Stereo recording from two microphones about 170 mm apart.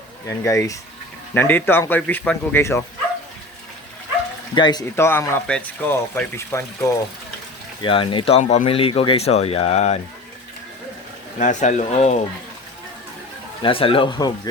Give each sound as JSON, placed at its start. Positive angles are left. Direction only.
{"t": 0.3, "sound": "speech", "side_deg": 20}
{"t": 4.5, "sound": "speech", "side_deg": 25}
{"t": 7.8, "sound": "speech", "side_deg": 30}
{"t": 11.3, "sound": "speech", "side_deg": 50}
{"t": 13.6, "sound": "speech", "side_deg": 30}